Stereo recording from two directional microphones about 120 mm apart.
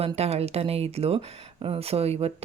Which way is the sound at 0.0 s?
60° right (ahead or behind).